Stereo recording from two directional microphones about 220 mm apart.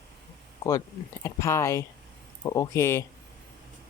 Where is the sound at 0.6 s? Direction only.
15° left (ahead or behind).